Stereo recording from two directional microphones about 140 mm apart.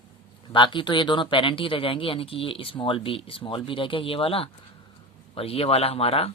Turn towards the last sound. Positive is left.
turn(degrees=45)  # may be behind; listen again after turning